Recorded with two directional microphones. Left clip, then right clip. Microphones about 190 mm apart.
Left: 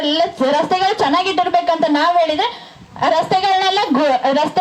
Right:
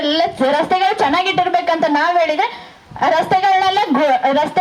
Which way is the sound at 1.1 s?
15° right (ahead or behind).